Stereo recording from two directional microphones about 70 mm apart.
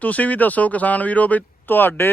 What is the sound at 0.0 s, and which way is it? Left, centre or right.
Speech, left.